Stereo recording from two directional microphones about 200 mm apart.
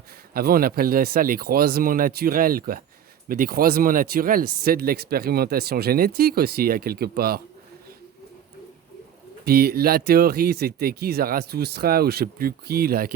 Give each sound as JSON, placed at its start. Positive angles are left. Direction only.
{"t": 0.3, "sound": "speech", "side_deg": -45}
{"t": 9.4, "sound": "speech", "side_deg": -50}